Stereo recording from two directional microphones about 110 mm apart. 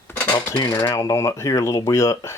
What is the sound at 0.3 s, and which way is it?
Speech, 25° left (ahead or behind).